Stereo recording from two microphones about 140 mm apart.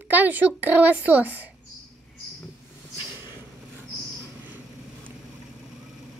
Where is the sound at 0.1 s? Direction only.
10° right (ahead or behind).